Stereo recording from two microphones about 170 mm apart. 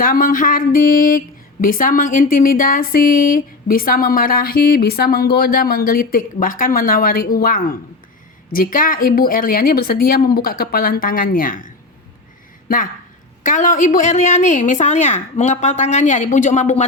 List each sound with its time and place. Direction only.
0.0 s a woman's voice: 55° left (ahead or behind)